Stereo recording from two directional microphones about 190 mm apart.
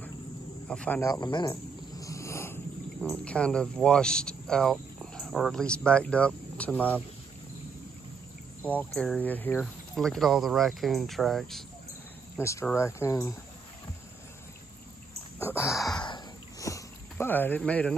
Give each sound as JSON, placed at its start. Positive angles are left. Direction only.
{"t": 0.7, "sound": "speech", "side_deg": 5}
{"t": 1.1, "sound": "speech", "side_deg": 25}
{"t": 8.6, "sound": "speech", "side_deg": 5}
{"t": 12.4, "sound": "speech", "side_deg": 15}
{"t": 15.5, "sound": "a sound", "side_deg": 15}